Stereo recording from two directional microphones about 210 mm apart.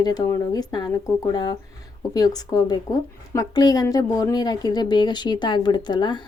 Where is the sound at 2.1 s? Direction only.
20° left (ahead or behind).